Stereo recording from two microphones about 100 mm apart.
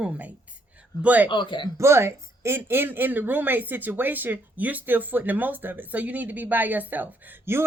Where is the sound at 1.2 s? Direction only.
55° left (ahead or behind).